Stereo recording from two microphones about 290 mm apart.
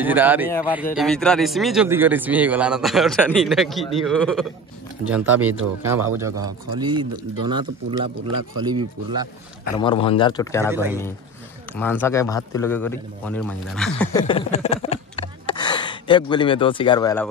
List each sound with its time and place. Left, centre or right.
0.0 s a man's voice: centre
9.8 s speech: centre
10.7 s speech: centre
11.7 s a man's voice: centre